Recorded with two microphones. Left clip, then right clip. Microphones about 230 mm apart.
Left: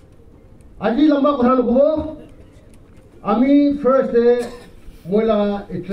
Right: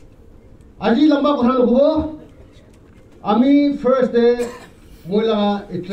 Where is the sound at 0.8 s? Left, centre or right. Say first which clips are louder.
Right 1 dB; right.